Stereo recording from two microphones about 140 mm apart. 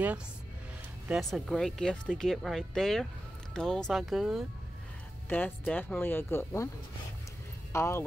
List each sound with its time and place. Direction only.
1.0 s speech: centre (ahead or behind)
5.3 s speech: 10° left (ahead or behind)
7.7 s speech: 20° left (ahead or behind)